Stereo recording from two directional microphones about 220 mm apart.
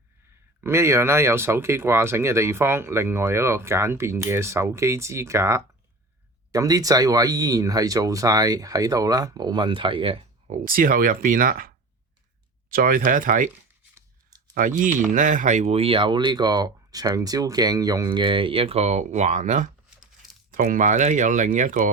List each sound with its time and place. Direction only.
0.6 s speech: 10° right (ahead or behind); by 11.7 s 40° right (ahead or behind)
12.7 s speech: 40° right (ahead or behind)
13.9 s a sound: 15° right (ahead or behind)
14.5 s speech: 35° right (ahead or behind)